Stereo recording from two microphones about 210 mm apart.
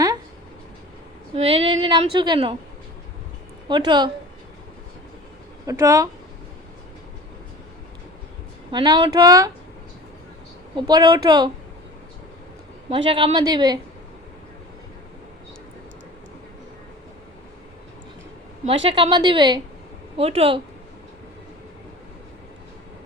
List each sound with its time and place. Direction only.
1.4 s a woman's voice: 25° right (ahead or behind)
3.7 s a woman's voice: 20° right (ahead or behind)
5.6 s speech: 15° right (ahead or behind)
8.7 s a woman's voice: 20° right (ahead or behind)
10.8 s a woman's voice: 20° right (ahead or behind)
12.9 s a woman's voice: 25° right (ahead or behind)
18.6 s a woman's voice: 30° right (ahead or behind)